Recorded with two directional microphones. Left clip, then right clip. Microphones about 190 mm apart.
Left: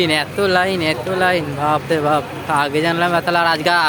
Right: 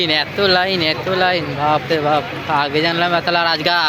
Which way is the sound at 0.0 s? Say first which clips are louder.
Right 1 dB; 20° left (ahead or behind).